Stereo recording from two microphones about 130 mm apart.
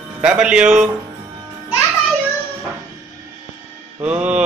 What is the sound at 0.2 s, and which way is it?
Speech, 5° right (ahead or behind).